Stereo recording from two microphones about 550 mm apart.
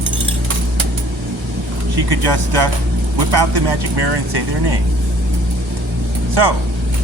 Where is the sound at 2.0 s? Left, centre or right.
Right.